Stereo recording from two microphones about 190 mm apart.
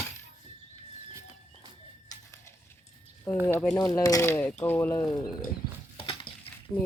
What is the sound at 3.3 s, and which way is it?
Speech, 10° left (ahead or behind).